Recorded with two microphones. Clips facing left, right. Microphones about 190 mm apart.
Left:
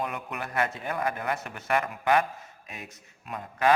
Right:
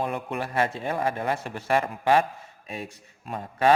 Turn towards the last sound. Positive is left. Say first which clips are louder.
# right 3 dB
turn(degrees=-30)  # may be behind; listen again after turning